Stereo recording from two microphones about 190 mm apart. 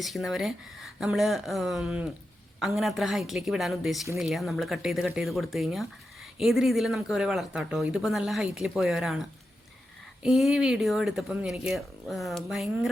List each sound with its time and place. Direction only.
0.0 s speech: centre (ahead or behind)
10.2 s speech: centre (ahead or behind)